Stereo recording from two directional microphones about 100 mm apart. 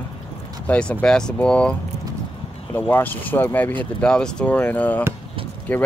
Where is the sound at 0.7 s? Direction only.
10° left (ahead or behind).